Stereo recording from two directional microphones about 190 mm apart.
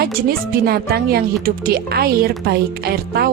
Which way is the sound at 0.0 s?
50° right (ahead or behind).